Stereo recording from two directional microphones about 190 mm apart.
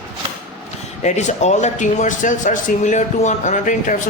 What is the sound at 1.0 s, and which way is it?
Speech, 35° left (ahead or behind).